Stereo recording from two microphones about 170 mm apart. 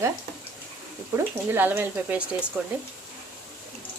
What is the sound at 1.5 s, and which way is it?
Speech, 10° right (ahead or behind).